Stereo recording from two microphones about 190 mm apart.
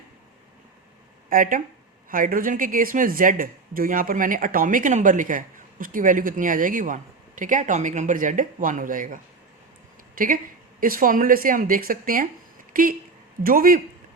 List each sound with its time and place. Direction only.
1.3 s speech: 45° right (ahead or behind)